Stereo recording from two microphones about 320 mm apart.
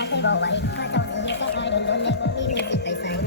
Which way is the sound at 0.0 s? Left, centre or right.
Left.